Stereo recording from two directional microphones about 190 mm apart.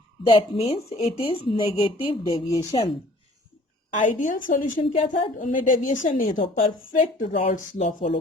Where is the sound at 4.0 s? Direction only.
40° left (ahead or behind).